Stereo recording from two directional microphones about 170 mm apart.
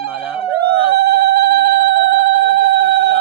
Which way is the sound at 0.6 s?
70° right (ahead or behind).